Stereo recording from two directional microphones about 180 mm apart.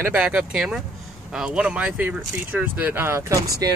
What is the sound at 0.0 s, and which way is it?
Speech, 5° right (ahead or behind).